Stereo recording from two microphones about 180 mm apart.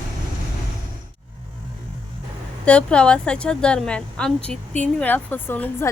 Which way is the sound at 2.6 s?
5° left (ahead or behind).